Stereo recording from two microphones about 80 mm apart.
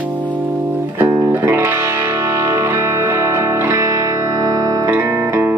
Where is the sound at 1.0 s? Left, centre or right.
Right.